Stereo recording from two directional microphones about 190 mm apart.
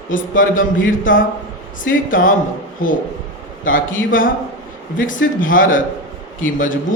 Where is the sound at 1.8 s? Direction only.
45° left (ahead or behind).